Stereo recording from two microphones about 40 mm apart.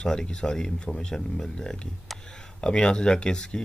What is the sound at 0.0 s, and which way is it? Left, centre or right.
Speech, centre.